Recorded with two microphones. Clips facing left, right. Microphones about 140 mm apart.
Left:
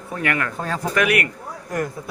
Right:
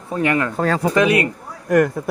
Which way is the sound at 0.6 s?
90° right.